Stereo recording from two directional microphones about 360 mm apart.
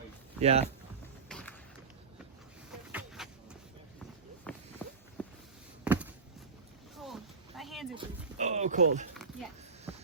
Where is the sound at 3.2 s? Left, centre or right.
Centre.